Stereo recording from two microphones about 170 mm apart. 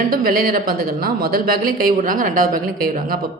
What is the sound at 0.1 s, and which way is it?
Speech, 60° right (ahead or behind).